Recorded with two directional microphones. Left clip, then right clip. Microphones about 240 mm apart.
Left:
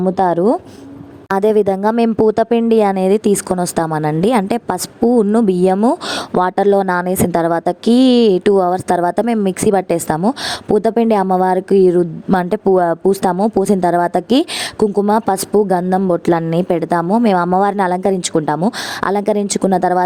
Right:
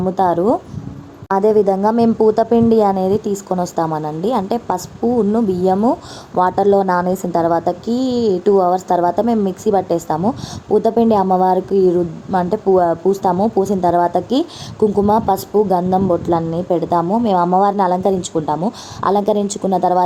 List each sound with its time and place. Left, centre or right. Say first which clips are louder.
0.0 s a woman's voice: left 1 dB; left
1.3 s speech: even; left
3.2 s a woman's voice: left 4 dB; left
12.7 s speech: even; left
13.1 s a woman's voice: left 1 dB; left